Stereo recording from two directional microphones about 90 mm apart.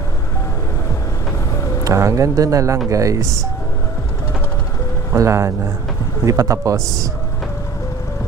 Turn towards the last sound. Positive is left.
turn(degrees=-40)  # may be behind; listen again after turning